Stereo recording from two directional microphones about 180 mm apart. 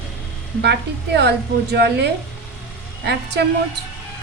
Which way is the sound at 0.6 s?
65° right (ahead or behind).